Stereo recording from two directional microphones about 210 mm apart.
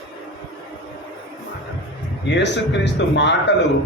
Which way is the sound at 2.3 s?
55° left (ahead or behind).